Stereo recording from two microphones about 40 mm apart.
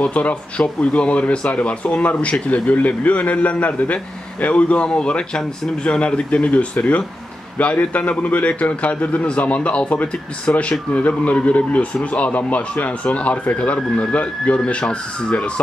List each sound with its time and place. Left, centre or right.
0.0 s a man's voice: left
10.5 s a man's voice: left